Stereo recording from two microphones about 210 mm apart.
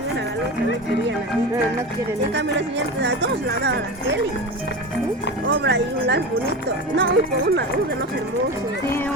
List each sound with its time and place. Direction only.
2.3 s speech: 55° right (ahead or behind)
5.5 s speech: 55° right (ahead or behind)